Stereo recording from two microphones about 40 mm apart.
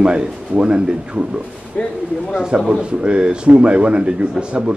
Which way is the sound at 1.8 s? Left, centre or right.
Left.